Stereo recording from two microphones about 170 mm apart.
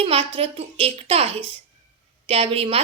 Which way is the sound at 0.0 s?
35° right (ahead or behind).